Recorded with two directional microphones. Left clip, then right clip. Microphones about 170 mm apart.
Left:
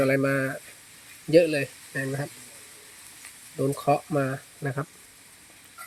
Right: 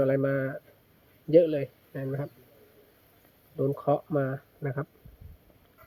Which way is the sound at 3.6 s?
10° left (ahead or behind).